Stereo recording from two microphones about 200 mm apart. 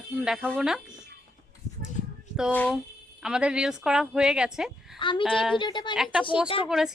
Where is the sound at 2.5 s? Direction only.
10° left (ahead or behind).